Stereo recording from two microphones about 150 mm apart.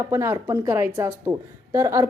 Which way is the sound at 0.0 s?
20° right (ahead or behind).